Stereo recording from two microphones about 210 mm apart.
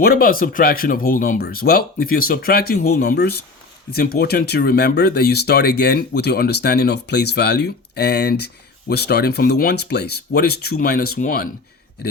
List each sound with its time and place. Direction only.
0.0 s speech: 45° left (ahead or behind)